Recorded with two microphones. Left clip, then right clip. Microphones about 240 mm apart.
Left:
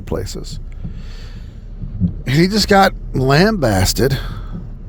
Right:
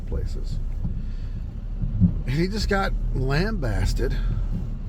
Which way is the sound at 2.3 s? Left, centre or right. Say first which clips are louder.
Left 13 dB; left.